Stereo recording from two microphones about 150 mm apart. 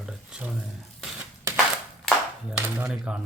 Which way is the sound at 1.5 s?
20° right (ahead or behind).